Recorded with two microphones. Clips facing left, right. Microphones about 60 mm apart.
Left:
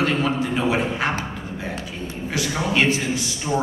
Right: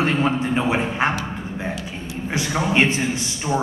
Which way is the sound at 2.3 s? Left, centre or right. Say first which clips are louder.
Right 2 dB; right.